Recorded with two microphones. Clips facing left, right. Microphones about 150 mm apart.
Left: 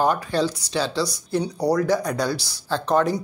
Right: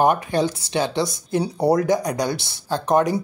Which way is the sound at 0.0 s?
20° right (ahead or behind).